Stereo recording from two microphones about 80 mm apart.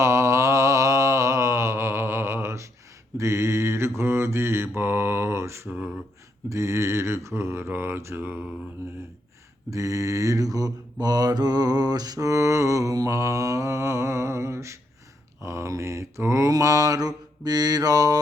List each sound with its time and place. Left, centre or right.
0.0 s mantra: right
9.6 s mantra: right